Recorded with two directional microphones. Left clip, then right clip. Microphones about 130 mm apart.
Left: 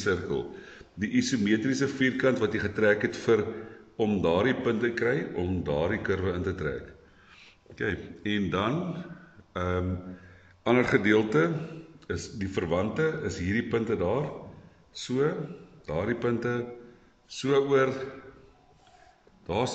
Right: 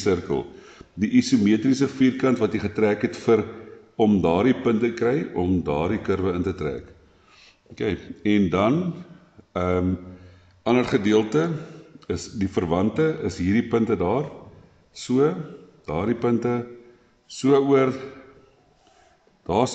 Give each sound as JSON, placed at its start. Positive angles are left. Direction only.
{"t": 0.0, "sound": "speech", "side_deg": -45}
{"t": 10.6, "sound": "a man's voice", "side_deg": -20}
{"t": 12.1, "sound": "a man's voice", "side_deg": -45}
{"t": 19.4, "sound": "speech", "side_deg": -45}